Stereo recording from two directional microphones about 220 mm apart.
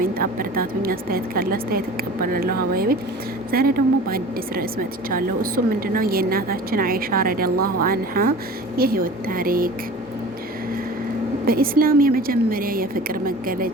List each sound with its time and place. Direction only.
0.0 s a woman's voice: 40° right (ahead or behind)
11.4 s a woman's voice: 40° right (ahead or behind)